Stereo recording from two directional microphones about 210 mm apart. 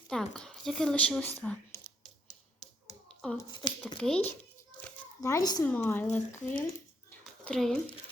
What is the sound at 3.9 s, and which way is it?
Speech, 5° left (ahead or behind).